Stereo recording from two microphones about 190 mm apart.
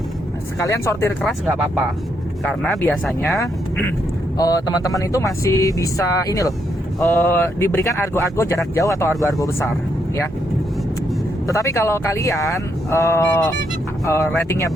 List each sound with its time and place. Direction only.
0.6 s speech: 15° left (ahead or behind)
1.2 s speech: centre (ahead or behind); by 9.6 s 15° left (ahead or behind)
11.4 s speech: 15° left (ahead or behind)